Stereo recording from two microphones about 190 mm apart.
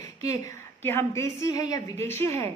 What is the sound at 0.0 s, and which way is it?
A woman's voice, 15° left (ahead or behind).